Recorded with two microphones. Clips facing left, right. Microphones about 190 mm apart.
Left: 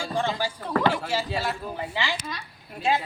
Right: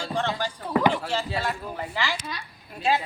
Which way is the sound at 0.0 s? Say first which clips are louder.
Left 1 dB; 10° left (ahead or behind).